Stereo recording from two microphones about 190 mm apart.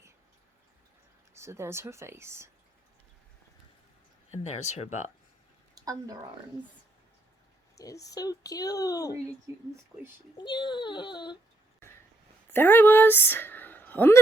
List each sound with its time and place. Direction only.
1.3 s speech: 15° right (ahead or behind)
4.3 s speech: 35° left (ahead or behind)
5.7 s speech: 20° right (ahead or behind)
7.8 s speech: 20° left (ahead or behind)
9.5 s speech: 15° right (ahead or behind)
10.3 s speech: 25° left (ahead or behind)
12.5 s speech: 10° left (ahead or behind)